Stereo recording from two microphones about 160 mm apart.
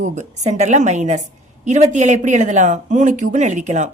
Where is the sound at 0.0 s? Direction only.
50° right (ahead or behind).